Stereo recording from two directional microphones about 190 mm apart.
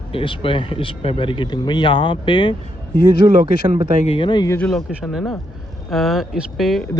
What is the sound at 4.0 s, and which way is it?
Speech, 30° left (ahead or behind).